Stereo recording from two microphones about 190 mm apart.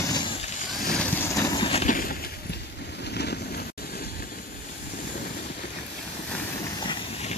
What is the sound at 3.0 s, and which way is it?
Vehicle, 60° left (ahead or behind).